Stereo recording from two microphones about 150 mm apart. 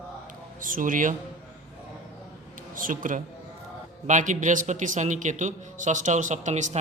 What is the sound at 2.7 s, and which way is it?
A man's voice, 65° right (ahead or behind).